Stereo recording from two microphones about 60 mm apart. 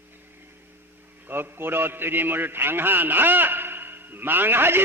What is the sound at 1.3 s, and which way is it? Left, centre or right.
A man's voice, right.